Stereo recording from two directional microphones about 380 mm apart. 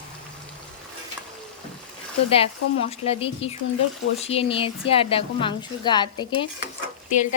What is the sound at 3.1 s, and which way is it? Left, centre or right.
Speech, centre.